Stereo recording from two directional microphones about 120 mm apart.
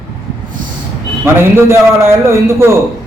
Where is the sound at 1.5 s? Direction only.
20° right (ahead or behind).